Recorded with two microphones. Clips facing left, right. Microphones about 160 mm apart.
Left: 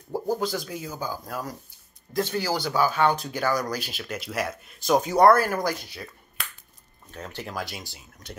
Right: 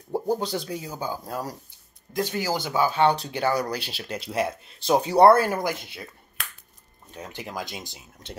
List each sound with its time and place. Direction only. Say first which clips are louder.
0.1 s speech: right 1 dB; 30° right (ahead or behind)
7.1 s speech: even; 15° right (ahead or behind)